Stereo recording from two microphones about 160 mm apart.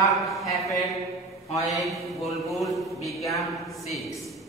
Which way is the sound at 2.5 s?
Centre (ahead or behind).